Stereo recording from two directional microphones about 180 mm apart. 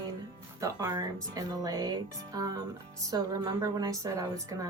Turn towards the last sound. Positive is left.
turn(degrees=-20)  # may be behind; listen again after turning